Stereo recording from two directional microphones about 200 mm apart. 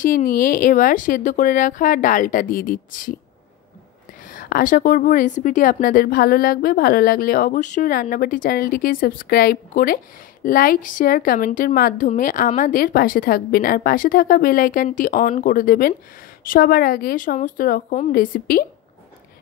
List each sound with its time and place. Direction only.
0.0 s a woman's voice: 45° left (ahead or behind)
4.3 s a woman's voice: 45° left (ahead or behind)